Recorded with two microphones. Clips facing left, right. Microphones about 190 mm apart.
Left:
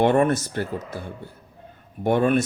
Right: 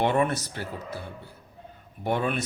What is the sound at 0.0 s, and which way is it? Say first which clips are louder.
Speech: left 6 dB; 50° left (ahead or behind).